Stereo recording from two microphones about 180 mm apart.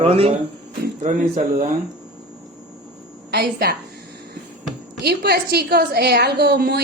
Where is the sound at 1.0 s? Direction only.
45° right (ahead or behind).